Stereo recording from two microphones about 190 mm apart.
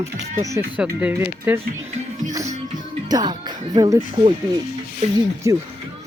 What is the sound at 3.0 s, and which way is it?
Speech, 20° right (ahead or behind).